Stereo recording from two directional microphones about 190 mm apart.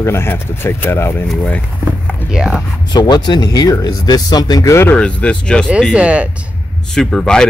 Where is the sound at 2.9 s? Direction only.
20° left (ahead or behind); by 5.7 s 5° left (ahead or behind).